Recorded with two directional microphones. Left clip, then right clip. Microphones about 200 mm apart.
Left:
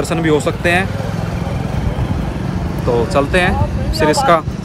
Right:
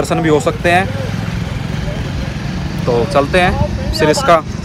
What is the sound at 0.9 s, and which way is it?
Vehicle, 25° left (ahead or behind).